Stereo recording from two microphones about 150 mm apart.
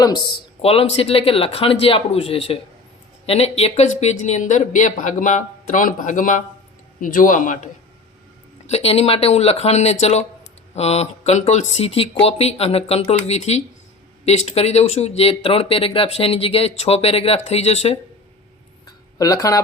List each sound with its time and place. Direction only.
0.0 s speech: 30° left (ahead or behind); by 7.7 s 60° left (ahead or behind)
8.7 s speech: 45° left (ahead or behind)
18.9 s a sound: 25° left (ahead or behind)